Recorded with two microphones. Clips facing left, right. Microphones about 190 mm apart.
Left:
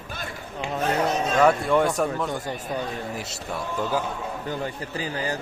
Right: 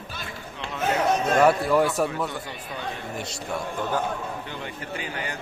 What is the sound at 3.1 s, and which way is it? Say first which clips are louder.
Speech: even; 5° left (ahead or behind).